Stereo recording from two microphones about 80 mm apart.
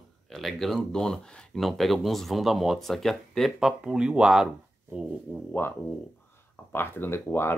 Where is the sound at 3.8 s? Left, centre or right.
Centre.